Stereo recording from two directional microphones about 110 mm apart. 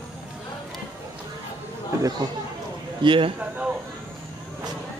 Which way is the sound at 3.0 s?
50° right (ahead or behind).